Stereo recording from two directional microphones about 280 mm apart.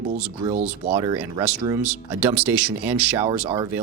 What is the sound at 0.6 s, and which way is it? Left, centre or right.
Speech, centre.